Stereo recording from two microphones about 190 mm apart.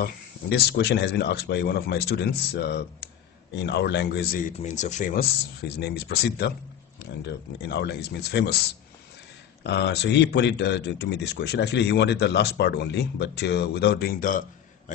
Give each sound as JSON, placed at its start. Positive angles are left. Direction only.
{"t": 0.0, "sound": "speech", "side_deg": 55}
{"t": 4.6, "sound": "speech", "side_deg": 40}
{"t": 9.6, "sound": "speech", "side_deg": 65}